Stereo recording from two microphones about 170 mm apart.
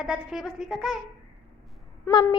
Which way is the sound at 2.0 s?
15° left (ahead or behind).